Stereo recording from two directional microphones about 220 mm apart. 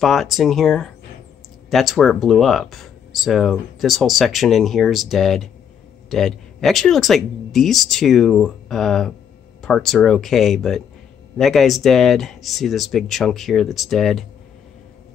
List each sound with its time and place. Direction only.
0.0 s speech: centre (ahead or behind)